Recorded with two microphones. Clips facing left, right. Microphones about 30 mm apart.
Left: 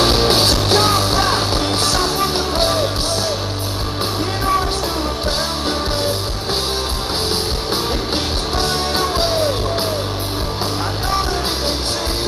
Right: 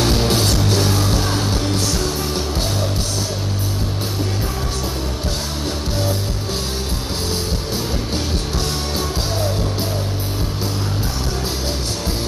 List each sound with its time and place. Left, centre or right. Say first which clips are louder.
0.0 s music: left 4 dB; left
7.2 s music: left 3 dB; left